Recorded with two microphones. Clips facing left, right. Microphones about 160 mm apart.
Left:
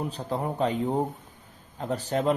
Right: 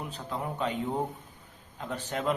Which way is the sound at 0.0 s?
35° left (ahead or behind).